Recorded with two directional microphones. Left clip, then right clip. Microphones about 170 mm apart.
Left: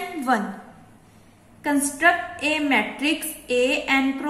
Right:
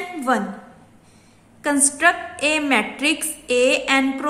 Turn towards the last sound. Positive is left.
turn(degrees=-25)  # may be behind; listen again after turning